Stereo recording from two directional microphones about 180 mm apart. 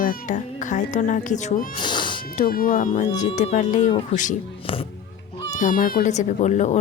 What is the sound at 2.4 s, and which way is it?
Speech, 50° left (ahead or behind).